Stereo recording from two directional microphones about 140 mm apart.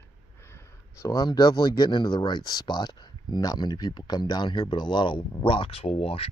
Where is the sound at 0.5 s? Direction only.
20° left (ahead or behind).